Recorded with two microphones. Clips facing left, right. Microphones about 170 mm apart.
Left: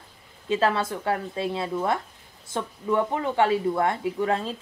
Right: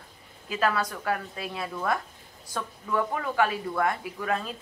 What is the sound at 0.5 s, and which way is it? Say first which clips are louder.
Speech: left 4 dB; 25° left (ahead or behind).